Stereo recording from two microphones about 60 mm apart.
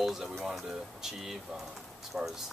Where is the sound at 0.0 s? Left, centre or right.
Centre.